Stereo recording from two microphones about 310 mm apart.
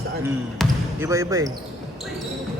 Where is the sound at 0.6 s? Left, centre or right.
Centre.